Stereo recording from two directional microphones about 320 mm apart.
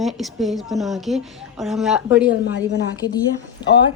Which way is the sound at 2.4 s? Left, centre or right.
Left.